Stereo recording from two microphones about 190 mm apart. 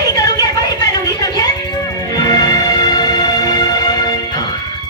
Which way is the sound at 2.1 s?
20° left (ahead or behind).